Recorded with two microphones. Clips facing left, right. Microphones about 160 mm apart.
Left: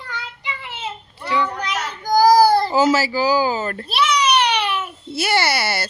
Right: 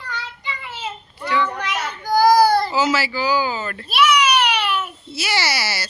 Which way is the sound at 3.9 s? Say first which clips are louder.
Right 3 dB; 30° left (ahead or behind).